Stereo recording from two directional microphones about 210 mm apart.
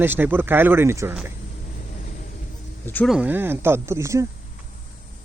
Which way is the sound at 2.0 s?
40° left (ahead or behind).